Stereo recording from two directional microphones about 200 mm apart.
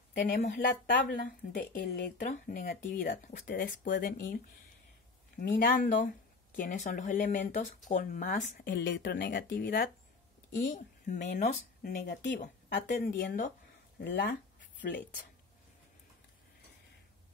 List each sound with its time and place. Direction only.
0.1 s speech: 55° left (ahead or behind)
0.4 s a woman's voice: 45° left (ahead or behind)
5.4 s a woman's voice: 50° left (ahead or behind)
11.1 s a woman's voice: 45° left (ahead or behind)
12.8 s a woman's voice: 40° left (ahead or behind)